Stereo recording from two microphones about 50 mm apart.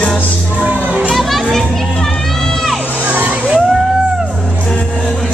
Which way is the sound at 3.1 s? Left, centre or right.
Right.